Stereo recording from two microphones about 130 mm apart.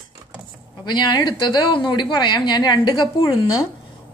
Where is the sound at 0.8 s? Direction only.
35° left (ahead or behind).